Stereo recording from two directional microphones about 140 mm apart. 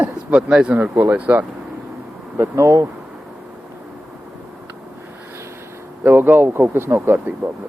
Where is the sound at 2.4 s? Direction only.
20° right (ahead or behind).